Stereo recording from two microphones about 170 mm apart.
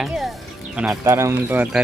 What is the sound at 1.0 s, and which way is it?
Speech, 15° right (ahead or behind).